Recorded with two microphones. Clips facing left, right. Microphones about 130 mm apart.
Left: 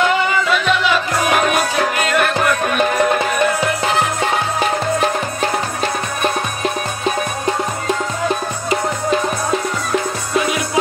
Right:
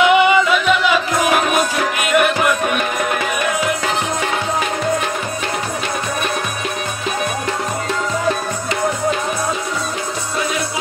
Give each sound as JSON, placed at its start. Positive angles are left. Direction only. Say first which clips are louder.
{"t": 0.0, "sound": "music", "louder": "right 4 dB", "side_deg": -15}